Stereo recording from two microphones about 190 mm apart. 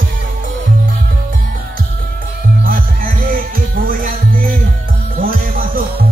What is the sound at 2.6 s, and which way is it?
Music, 45° right (ahead or behind).